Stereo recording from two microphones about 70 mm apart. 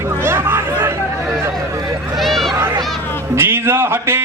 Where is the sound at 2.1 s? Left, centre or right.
Centre.